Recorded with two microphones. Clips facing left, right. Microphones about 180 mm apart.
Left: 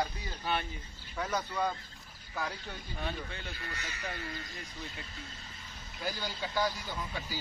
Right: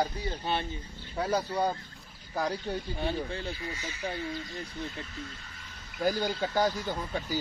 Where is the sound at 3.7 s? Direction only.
65° left (ahead or behind).